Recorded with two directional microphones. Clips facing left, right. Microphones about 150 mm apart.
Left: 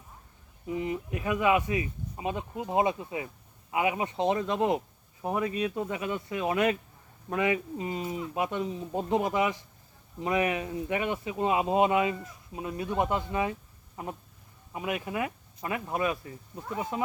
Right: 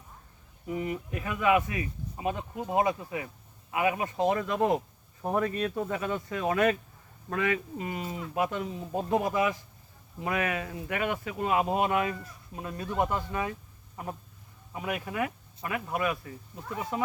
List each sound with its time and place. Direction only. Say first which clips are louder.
0.7 s speech: left 1 dB; 20° left (ahead or behind)